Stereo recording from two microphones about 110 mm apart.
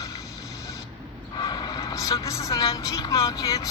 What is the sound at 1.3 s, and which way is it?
A woman's voice, 40° left (ahead or behind).